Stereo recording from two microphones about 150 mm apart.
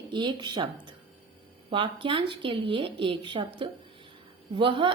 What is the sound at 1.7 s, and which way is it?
A woman's voice, 35° right (ahead or behind).